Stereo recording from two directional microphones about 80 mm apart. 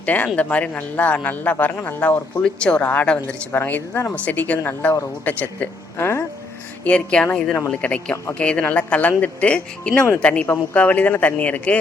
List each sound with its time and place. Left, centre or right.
0.0 s a woman's voice: centre
6.0 s speech: left
6.8 s a woman's voice: centre